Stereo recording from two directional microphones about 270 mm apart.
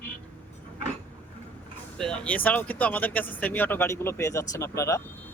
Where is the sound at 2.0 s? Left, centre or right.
Centre.